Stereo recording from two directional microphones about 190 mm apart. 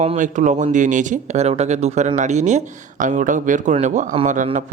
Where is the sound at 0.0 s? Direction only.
35° right (ahead or behind).